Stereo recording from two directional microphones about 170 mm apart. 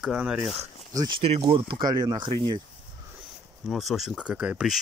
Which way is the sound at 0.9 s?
30° right (ahead or behind).